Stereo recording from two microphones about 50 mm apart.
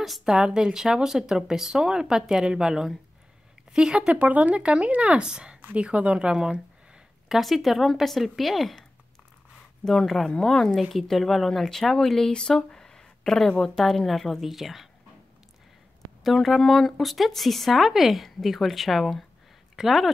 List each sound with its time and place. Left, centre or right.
0.0 s speech: centre
4.1 s speech: right
7.2 s speech: centre
9.8 s speech: centre
13.8 s speech: centre
16.3 s speech: centre